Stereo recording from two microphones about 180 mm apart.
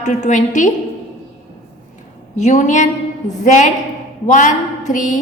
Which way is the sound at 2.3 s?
40° left (ahead or behind).